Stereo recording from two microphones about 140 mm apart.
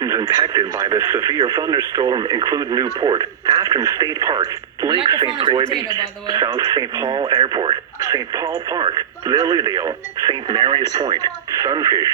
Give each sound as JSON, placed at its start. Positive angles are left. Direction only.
{"t": 0.0, "sound": "speech", "side_deg": -30}